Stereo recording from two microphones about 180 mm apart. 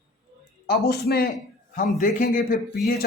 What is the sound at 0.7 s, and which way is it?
Speech, 60° left (ahead or behind).